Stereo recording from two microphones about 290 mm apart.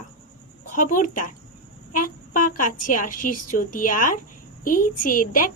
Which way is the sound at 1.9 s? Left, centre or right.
Left.